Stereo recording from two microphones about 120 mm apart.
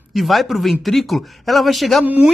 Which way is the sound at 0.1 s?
Centre (ahead or behind).